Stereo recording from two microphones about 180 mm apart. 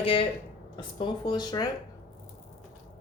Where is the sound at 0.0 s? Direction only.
30° left (ahead or behind).